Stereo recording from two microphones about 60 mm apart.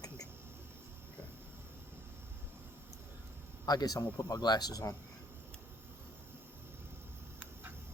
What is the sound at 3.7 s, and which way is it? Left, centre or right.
Speech, left.